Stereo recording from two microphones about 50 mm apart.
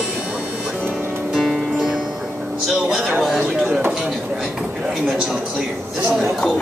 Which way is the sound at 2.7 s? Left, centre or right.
Centre.